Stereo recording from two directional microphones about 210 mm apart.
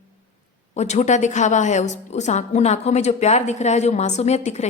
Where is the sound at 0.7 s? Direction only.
35° left (ahead or behind).